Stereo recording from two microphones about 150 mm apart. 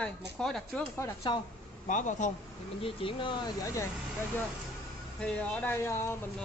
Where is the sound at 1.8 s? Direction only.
55° left (ahead or behind).